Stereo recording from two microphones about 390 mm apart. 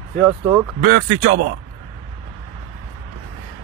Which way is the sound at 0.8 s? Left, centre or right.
Right.